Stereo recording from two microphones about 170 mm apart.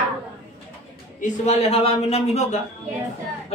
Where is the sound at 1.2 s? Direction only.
40° left (ahead or behind).